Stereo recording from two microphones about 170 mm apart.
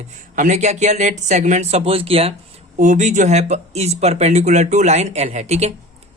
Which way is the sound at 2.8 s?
45° right (ahead or behind).